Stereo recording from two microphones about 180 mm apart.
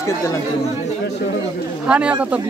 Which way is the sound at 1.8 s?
5° right (ahead or behind).